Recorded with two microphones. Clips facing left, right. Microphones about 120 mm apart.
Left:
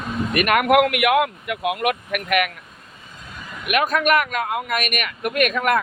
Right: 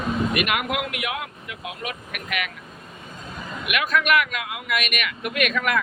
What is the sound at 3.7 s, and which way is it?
A man's voice, 40° left (ahead or behind).